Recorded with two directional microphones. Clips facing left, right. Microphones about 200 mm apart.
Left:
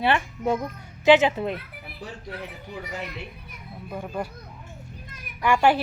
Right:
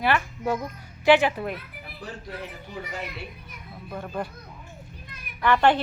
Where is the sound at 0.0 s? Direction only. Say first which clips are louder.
Left 1 dB; 25° left (ahead or behind).